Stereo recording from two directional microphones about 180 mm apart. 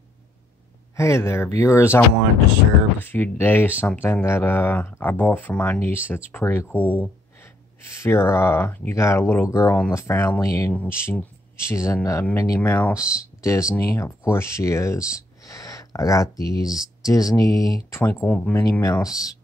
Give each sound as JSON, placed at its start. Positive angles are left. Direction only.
{"t": 0.9, "sound": "speech", "side_deg": 15}
{"t": 18.6, "sound": "speech", "side_deg": 20}